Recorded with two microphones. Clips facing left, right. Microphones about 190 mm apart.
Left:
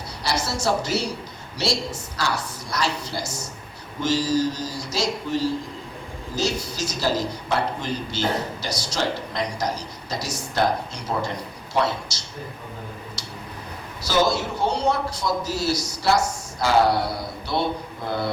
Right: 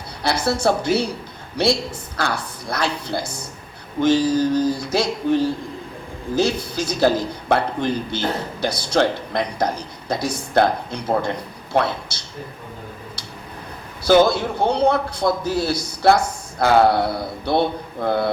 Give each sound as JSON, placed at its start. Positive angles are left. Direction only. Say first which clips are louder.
{"t": 0.2, "sound": "a man's voice", "louder": "right 6 dB", "side_deg": -55}
{"t": 14.0, "sound": "a man's voice", "louder": "right 7 dB", "side_deg": -55}